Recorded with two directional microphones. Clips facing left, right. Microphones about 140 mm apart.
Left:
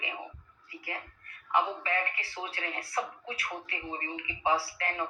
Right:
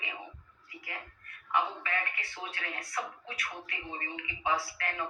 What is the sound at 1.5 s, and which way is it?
Speech, 30° left (ahead or behind).